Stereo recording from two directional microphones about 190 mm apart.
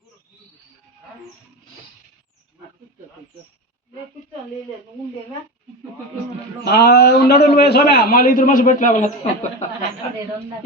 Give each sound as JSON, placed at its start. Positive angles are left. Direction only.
{"t": 6.7, "sound": "a man's voice", "side_deg": 60}